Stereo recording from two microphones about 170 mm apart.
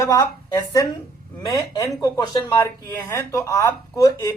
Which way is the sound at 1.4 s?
25° left (ahead or behind).